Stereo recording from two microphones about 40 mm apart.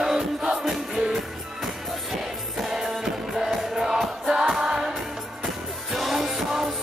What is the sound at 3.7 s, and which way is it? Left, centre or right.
Music, centre.